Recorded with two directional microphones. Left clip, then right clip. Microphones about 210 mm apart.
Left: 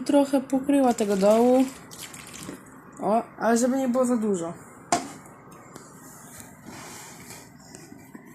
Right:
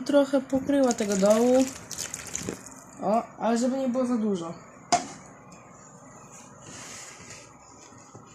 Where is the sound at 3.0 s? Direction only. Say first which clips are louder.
Left 2 dB; centre (ahead or behind).